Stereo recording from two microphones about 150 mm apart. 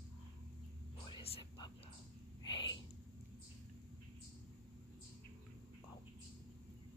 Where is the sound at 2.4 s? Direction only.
30° left (ahead or behind).